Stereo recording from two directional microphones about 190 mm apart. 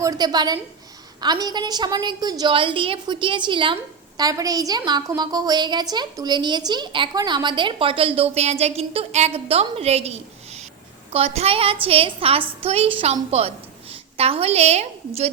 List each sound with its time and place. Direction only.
0.0 s a woman's voice: 20° right (ahead or behind)